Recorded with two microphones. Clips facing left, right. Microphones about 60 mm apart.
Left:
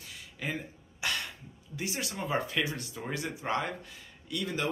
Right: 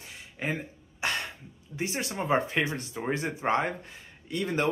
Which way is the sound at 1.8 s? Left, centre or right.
Right.